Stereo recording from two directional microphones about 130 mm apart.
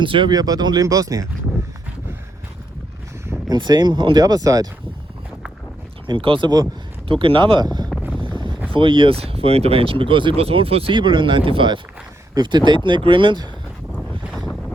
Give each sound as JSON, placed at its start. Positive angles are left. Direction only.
{"t": 0.0, "sound": "speech", "side_deg": -40}
{"t": 3.5, "sound": "speech", "side_deg": -35}
{"t": 6.1, "sound": "speech", "side_deg": -40}
{"t": 8.2, "sound": "boat", "side_deg": -35}
{"t": 8.7, "sound": "speech", "side_deg": -40}
{"t": 14.3, "sound": "wind noise", "side_deg": 0}